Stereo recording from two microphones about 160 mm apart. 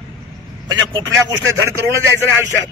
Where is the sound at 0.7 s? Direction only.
20° right (ahead or behind).